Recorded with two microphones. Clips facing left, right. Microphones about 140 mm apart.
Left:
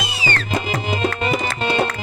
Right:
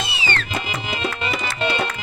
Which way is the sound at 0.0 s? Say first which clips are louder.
Left 2 dB; 40° left (ahead or behind).